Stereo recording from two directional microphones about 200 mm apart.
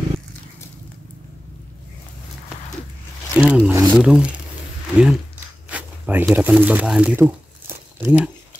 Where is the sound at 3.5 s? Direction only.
15° right (ahead or behind).